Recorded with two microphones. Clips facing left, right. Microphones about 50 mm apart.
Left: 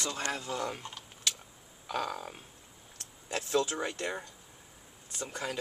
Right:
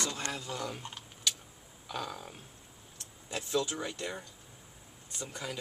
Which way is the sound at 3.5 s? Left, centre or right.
Left.